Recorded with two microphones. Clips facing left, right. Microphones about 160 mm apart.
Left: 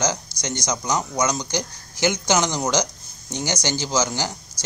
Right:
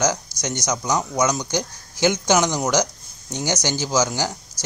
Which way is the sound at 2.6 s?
15° left (ahead or behind).